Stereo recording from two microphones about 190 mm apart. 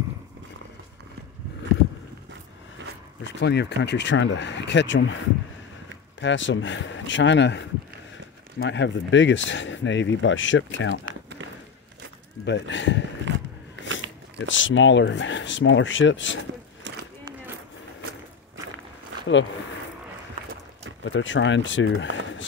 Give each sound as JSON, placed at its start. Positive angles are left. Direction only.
{"t": 3.3, "sound": "speech", "side_deg": 65}
{"t": 6.2, "sound": "speech", "side_deg": 75}
{"t": 12.4, "sound": "speech", "side_deg": 70}
{"t": 13.8, "sound": "a sound", "side_deg": -80}
{"t": 14.5, "sound": "speech", "side_deg": 80}
{"t": 16.9, "sound": "a sound", "side_deg": -75}
{"t": 21.0, "sound": "speech", "side_deg": 80}